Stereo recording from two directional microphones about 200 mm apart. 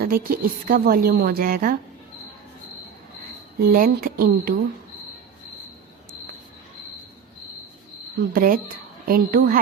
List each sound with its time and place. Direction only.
0.0 s a woman's voice: 45° right (ahead or behind)
3.6 s a woman's voice: 50° right (ahead or behind)
8.3 s a woman's voice: 45° right (ahead or behind)